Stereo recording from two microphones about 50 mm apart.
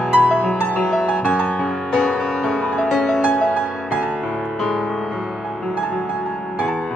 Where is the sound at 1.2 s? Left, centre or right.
Left.